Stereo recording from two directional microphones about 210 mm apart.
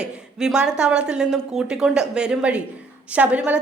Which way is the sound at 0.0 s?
5° right (ahead or behind).